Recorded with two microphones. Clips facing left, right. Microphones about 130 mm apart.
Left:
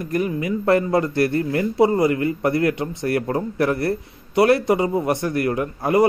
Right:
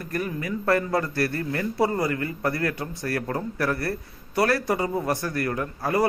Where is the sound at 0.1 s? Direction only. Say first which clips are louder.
Left 6 dB; 15° left (ahead or behind).